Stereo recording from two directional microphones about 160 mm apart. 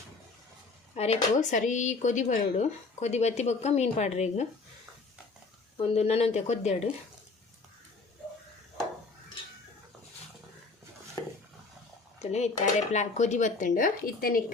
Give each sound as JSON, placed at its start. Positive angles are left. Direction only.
{"t": 0.9, "sound": "speech", "side_deg": 40}
{"t": 5.7, "sound": "speech", "side_deg": 40}
{"t": 12.2, "sound": "speech", "side_deg": 45}